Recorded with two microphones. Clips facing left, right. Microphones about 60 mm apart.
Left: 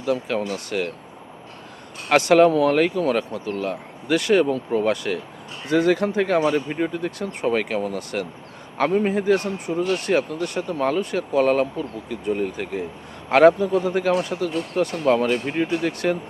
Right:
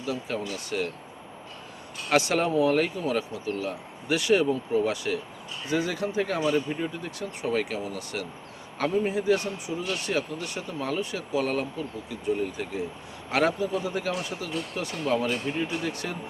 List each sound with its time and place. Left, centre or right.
0.0 s speech: left
2.0 s speech: left